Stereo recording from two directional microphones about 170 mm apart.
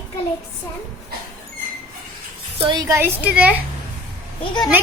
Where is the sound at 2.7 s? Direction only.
20° right (ahead or behind).